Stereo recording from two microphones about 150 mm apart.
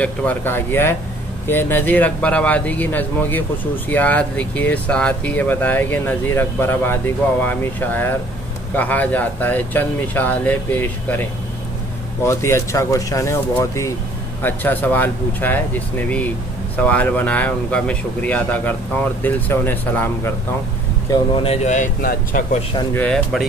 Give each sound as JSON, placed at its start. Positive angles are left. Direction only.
{"t": 0.0, "sound": "speech", "side_deg": 10}
{"t": 12.3, "sound": "speech", "side_deg": 20}
{"t": 21.4, "sound": "speech", "side_deg": 45}
{"t": 22.9, "sound": "speech", "side_deg": 5}